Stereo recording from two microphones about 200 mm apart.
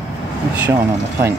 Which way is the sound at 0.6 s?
10° right (ahead or behind).